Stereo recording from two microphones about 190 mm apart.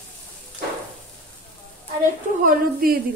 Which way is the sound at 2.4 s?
50° right (ahead or behind).